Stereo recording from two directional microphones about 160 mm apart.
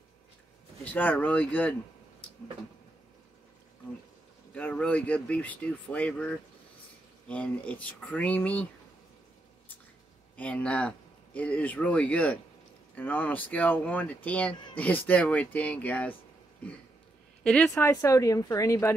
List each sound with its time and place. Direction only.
0.8 s speech: 10° left (ahead or behind)
4.6 s speech: 10° left (ahead or behind)
10.3 s speech: 10° left (ahead or behind)
17.7 s speech: 15° left (ahead or behind)